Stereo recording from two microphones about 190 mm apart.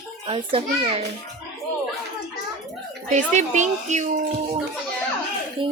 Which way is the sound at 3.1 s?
40° right (ahead or behind).